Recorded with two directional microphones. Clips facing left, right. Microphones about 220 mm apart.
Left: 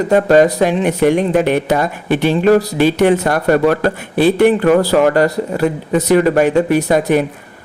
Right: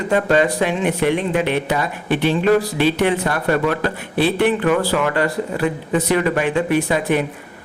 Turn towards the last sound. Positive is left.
turn(degrees=40)  # may be behind; listen again after turning